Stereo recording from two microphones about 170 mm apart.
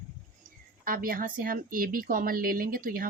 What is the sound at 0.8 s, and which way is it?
Speech, 55° right (ahead or behind).